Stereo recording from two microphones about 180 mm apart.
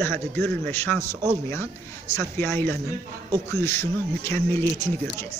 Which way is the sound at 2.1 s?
15° left (ahead or behind).